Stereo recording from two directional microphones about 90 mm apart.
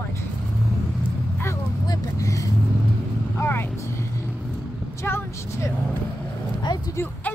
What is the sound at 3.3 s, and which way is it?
Vehicle, 25° left (ahead or behind).